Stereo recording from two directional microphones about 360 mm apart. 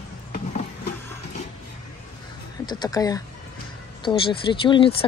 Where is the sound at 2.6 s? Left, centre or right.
Centre.